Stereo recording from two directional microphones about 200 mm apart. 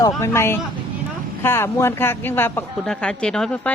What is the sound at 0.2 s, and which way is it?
A woman's voice, 15° left (ahead or behind).